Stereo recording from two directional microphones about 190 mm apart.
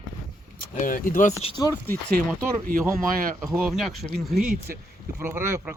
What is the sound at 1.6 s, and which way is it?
Speech, 10° left (ahead or behind).